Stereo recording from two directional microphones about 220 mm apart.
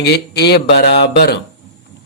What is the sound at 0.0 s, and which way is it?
A man's voice, 45° left (ahead or behind).